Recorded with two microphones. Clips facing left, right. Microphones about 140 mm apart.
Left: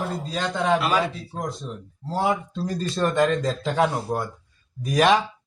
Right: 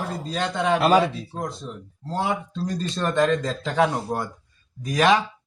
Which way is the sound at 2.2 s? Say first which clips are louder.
Left 2 dB; 5° left (ahead or behind).